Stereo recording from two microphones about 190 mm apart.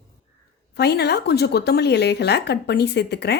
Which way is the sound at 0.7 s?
60° left (ahead or behind).